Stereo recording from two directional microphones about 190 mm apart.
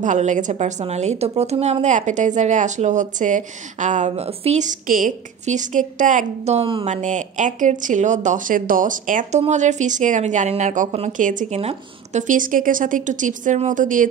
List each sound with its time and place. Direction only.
0.0 s a woman's voice: 40° right (ahead or behind)